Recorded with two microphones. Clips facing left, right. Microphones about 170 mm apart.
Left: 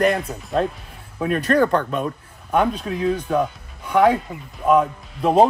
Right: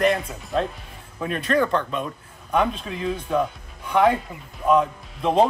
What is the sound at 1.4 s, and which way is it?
Speech, 40° left (ahead or behind).